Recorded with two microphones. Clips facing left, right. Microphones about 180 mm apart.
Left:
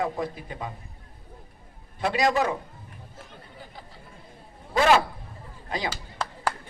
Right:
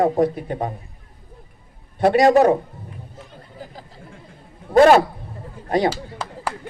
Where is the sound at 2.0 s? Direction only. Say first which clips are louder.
Right 10 dB; 55° right (ahead or behind).